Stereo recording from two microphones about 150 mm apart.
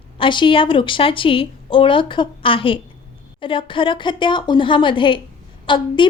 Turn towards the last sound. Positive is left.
turn(degrees=35)  # may be behind; listen again after turning